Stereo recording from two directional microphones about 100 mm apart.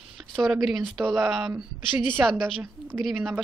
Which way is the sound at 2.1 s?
20° right (ahead or behind).